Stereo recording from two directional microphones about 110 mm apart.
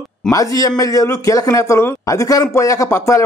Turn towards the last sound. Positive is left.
turn(degrees=25)  # may be behind; listen again after turning